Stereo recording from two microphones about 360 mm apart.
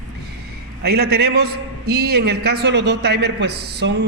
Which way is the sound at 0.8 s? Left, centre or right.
Right.